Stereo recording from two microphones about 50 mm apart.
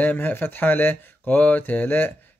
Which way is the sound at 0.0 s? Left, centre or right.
Left.